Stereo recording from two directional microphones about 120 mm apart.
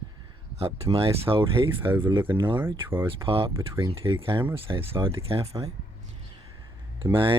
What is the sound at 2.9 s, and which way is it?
Speech, 20° right (ahead or behind).